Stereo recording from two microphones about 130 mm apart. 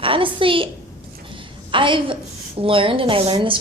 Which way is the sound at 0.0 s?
40° right (ahead or behind).